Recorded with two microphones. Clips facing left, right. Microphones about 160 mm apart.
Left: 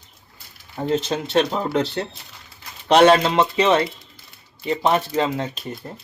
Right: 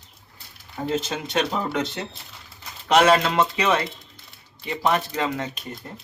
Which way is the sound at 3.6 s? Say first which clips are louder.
Left 5 dB; 25° left (ahead or behind).